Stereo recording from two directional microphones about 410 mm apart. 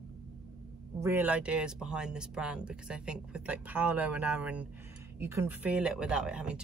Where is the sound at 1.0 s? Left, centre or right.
Centre.